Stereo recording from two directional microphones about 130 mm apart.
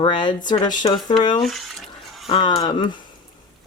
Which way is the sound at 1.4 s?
Centre (ahead or behind).